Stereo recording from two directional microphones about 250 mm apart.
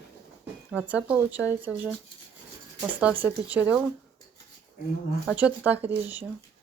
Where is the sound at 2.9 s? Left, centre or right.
Centre.